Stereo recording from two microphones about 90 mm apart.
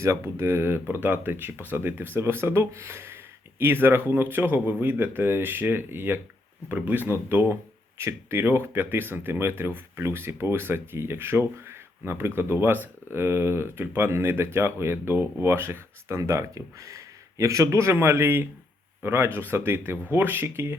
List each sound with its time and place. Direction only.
0.0 s speech: 30° right (ahead or behind)